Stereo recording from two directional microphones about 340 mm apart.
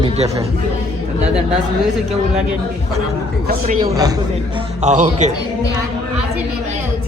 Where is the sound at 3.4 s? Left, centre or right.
Right.